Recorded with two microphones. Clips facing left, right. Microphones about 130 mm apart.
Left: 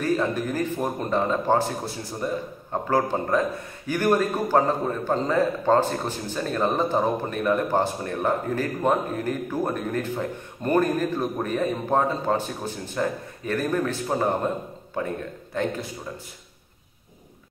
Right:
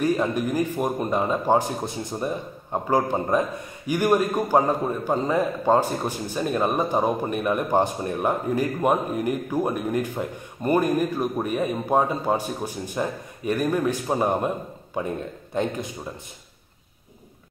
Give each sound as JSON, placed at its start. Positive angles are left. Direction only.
{"t": 0.0, "sound": "speech", "side_deg": -15}